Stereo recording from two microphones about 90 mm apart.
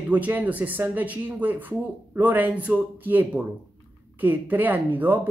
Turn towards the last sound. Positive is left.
turn(degrees=-20)  # may be behind; listen again after turning